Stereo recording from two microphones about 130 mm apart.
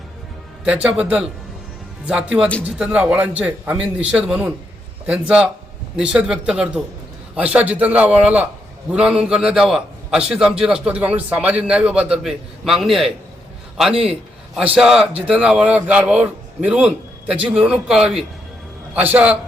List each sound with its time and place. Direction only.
0.6 s a man's voice: 10° right (ahead or behind)